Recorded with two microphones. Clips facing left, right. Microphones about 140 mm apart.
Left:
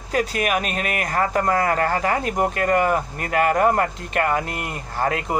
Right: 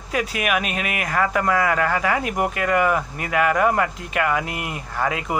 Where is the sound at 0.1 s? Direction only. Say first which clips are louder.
Left 1 dB; 40° left (ahead or behind).